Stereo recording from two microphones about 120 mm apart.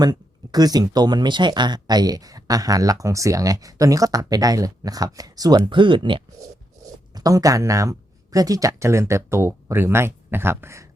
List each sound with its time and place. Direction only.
0.0 s speech: 35° right (ahead or behind)
7.1 s speech: 30° right (ahead or behind)